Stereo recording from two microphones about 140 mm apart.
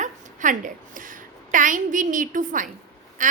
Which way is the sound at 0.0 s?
65° right (ahead or behind).